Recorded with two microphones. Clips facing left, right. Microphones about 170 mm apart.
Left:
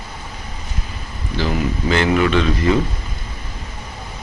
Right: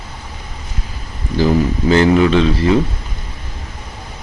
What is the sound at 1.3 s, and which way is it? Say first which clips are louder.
Speech: right 6 dB; 40° right (ahead or behind).